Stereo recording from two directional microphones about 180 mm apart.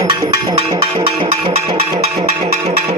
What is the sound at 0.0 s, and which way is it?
Music, 20° right (ahead or behind).